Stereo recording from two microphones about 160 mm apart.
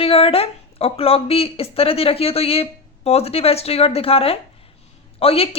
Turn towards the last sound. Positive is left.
turn(degrees=35)  # may be behind; listen again after turning